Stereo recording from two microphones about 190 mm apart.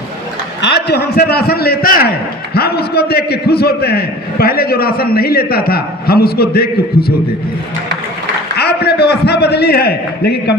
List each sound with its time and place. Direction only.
0.6 s a man's voice: 60° left (ahead or behind)
8.5 s a man's voice: 60° left (ahead or behind)